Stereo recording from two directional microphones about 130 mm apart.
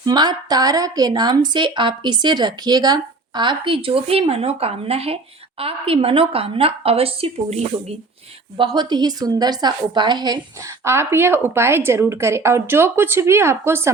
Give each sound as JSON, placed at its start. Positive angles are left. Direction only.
{"t": 0.0, "sound": "a woman's voice", "side_deg": -30}
{"t": 8.5, "sound": "a woman's voice", "side_deg": -35}
{"t": 10.8, "sound": "a woman's voice", "side_deg": -20}